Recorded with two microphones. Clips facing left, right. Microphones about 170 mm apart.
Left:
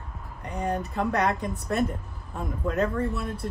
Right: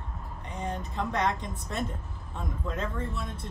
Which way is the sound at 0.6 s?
65° left (ahead or behind).